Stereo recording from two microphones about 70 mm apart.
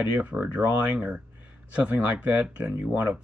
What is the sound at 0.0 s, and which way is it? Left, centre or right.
Speech, right.